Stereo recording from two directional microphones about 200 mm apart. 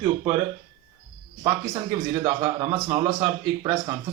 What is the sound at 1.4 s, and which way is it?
Speech, 15° right (ahead or behind).